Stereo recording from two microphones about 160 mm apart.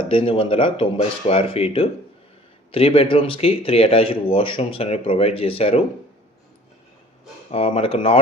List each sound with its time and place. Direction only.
0.1 s speech: 35° left (ahead or behind)
7.5 s speech: 40° left (ahead or behind)